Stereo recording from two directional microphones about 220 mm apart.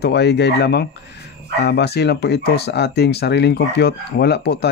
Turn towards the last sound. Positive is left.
turn(degrees=50)  # may be behind; listen again after turning